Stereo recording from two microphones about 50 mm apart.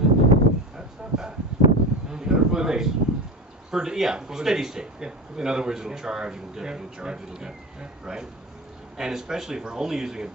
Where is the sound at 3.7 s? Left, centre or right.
Centre.